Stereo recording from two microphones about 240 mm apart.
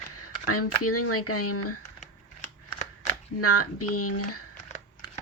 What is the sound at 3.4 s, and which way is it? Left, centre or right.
Speech, left.